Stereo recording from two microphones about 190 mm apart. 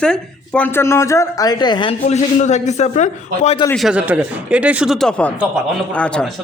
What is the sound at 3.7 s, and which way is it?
A man's voice, centre (ahead or behind).